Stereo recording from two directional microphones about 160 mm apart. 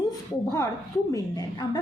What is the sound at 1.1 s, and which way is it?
Speech, 20° left (ahead or behind).